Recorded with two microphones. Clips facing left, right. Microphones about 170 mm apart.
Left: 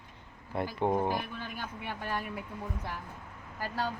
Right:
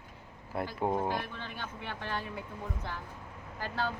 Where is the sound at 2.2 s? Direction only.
25° right (ahead or behind).